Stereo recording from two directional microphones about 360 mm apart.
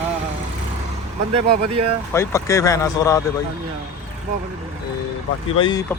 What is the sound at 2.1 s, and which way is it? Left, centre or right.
Speech, centre.